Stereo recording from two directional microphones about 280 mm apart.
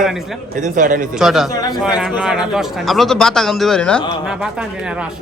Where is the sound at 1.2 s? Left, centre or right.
Centre.